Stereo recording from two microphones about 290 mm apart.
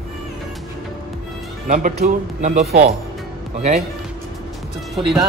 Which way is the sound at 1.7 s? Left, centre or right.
Right.